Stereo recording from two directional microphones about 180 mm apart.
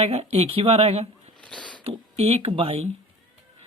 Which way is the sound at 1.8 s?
35° right (ahead or behind).